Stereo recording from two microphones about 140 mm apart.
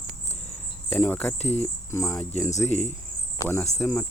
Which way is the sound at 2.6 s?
15° left (ahead or behind).